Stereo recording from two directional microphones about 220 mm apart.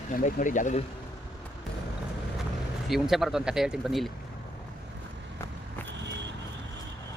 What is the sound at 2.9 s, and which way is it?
Speech, centre (ahead or behind).